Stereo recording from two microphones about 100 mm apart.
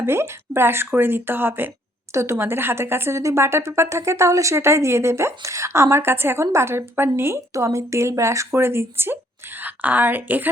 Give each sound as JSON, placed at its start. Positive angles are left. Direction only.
{"t": 0.0, "sound": "a woman's voice", "side_deg": -25}